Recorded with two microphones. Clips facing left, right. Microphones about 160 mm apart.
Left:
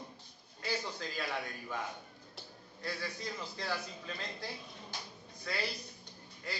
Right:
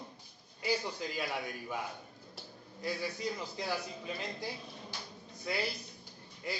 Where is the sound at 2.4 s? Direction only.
Centre (ahead or behind).